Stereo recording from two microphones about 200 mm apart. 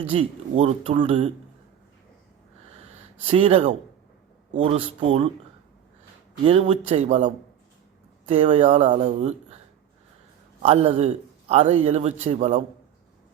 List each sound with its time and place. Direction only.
0.0 s a man's voice: 30° right (ahead or behind)
3.2 s speech: 30° right (ahead or behind)
6.4 s a man's voice: 30° right (ahead or behind)
10.6 s a man's voice: 30° right (ahead or behind)